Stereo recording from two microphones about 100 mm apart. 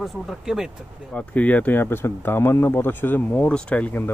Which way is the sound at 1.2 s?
15° left (ahead or behind).